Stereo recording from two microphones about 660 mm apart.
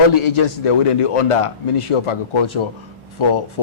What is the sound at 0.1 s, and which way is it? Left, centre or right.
Speech, left.